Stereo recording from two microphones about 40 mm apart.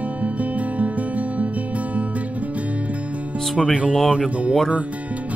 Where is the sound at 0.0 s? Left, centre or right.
Right.